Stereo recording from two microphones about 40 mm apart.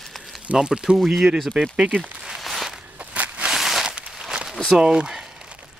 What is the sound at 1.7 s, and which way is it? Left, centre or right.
Speech, right.